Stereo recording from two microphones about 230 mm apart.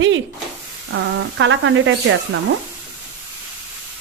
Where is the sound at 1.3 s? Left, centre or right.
Right.